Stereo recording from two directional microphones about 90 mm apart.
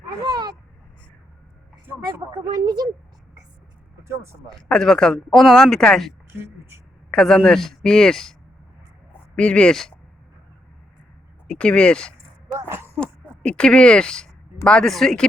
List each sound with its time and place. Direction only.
0.2 s cat: 50° right (ahead or behind)
2.3 s speech: 50° right (ahead or behind)
4.1 s speech: 30° right (ahead or behind)
4.5 s speech: 5° left (ahead or behind)
6.3 s speech: 30° right (ahead or behind)
7.1 s speech: 5° left (ahead or behind)
11.4 s speech: 10° left (ahead or behind)
12.5 s speech: 30° right (ahead or behind)
13.0 s speech: 10° left (ahead or behind)